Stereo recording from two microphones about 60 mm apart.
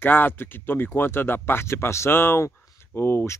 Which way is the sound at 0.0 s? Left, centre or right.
Left.